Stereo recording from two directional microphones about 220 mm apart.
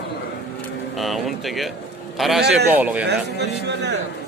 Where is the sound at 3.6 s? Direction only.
50° right (ahead or behind).